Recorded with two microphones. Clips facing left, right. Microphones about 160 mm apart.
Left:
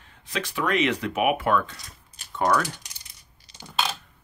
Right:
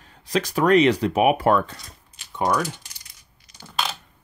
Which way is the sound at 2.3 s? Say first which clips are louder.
Even; 15° right (ahead or behind).